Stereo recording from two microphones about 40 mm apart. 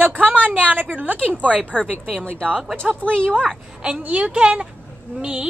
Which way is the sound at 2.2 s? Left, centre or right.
Left.